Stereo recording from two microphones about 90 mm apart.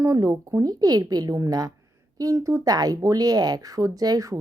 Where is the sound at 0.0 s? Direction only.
40° right (ahead or behind).